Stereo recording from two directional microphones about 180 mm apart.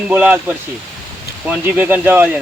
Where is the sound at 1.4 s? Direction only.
10° right (ahead or behind).